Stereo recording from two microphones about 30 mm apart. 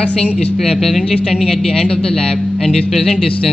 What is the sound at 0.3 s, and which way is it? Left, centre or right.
Speech, left.